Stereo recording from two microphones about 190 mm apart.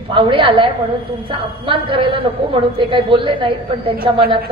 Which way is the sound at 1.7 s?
25° right (ahead or behind).